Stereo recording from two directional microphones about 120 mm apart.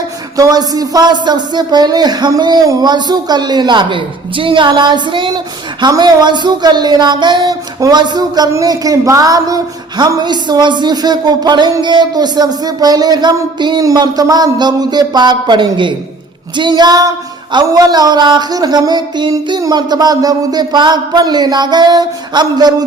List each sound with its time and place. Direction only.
0.3 s a woman's voice: 30° right (ahead or behind)